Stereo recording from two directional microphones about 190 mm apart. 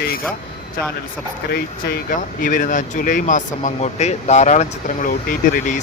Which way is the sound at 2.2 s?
45° left (ahead or behind).